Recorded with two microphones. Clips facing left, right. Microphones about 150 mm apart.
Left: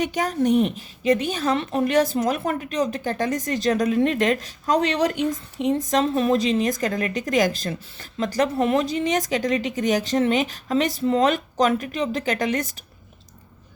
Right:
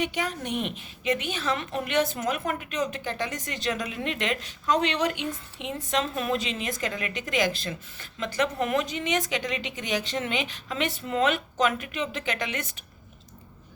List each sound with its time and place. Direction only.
0.0 s a woman's voice: 40° left (ahead or behind)